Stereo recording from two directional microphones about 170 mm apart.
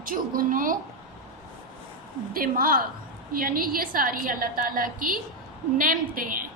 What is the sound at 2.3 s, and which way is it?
A woman's voice, 60° right (ahead or behind).